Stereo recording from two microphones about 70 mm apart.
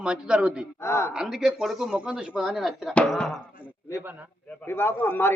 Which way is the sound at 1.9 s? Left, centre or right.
Centre.